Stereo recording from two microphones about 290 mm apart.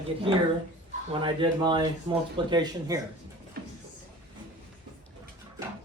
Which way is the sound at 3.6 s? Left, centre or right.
Right.